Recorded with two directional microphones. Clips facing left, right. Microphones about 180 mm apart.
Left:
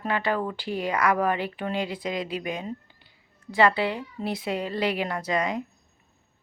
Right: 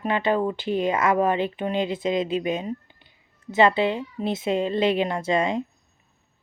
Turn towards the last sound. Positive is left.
turn(degrees=-25)  # may be behind; listen again after turning